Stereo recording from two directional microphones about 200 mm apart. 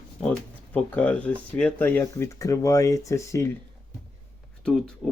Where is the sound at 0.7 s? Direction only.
5° left (ahead or behind).